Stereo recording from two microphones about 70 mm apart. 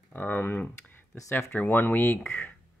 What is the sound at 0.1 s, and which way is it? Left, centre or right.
Speech, left.